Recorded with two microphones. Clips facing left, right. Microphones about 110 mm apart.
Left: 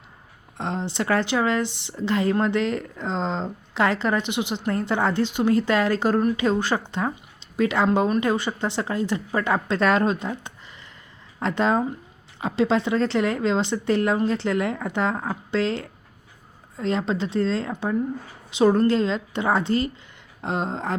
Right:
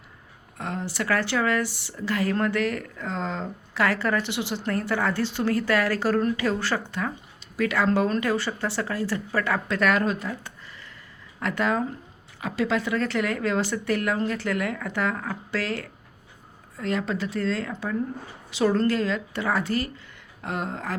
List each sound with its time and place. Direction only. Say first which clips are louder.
0.5 s speech: left 3 dB; 25° left (ahead or behind)